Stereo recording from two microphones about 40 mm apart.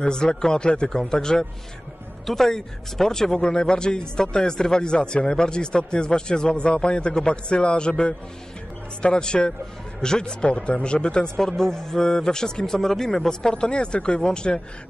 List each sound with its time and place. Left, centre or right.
0.0 s speech: centre